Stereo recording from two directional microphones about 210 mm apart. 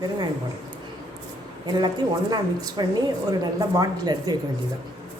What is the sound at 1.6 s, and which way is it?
Speech, 20° right (ahead or behind).